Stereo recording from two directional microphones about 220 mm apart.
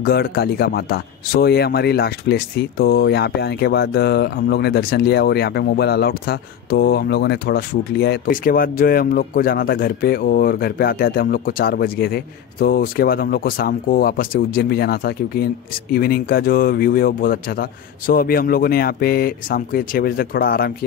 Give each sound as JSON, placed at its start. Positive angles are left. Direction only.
{"t": 0.0, "sound": "speech", "side_deg": 45}